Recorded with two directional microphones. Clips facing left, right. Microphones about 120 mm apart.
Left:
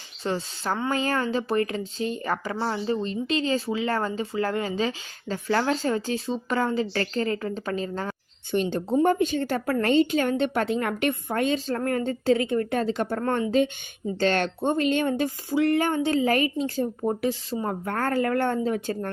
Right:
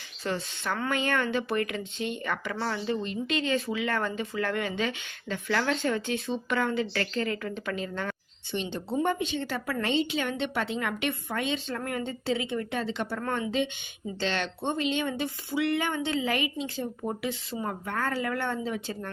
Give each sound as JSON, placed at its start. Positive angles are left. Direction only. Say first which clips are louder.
{"t": 0.2, "sound": "speech", "louder": "left 3 dB", "side_deg": 30}
{"t": 8.5, "sound": "a woman's voice", "louder": "left 7 dB", "side_deg": 45}